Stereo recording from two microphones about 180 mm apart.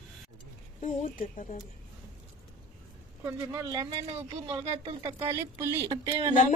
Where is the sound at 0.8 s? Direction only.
45° left (ahead or behind).